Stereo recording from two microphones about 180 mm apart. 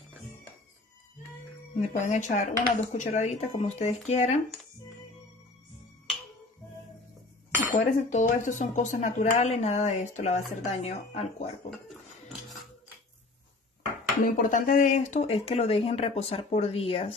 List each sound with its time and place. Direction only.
1.8 s speech: 40° left (ahead or behind)
7.7 s speech: 45° left (ahead or behind)
14.2 s speech: 50° left (ahead or behind); by 17.1 s 30° left (ahead or behind)